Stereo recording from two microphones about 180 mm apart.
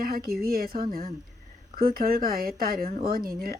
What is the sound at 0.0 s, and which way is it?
Speech, 55° right (ahead or behind).